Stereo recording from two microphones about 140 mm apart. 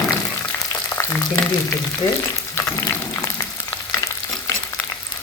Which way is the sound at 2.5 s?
20° left (ahead or behind).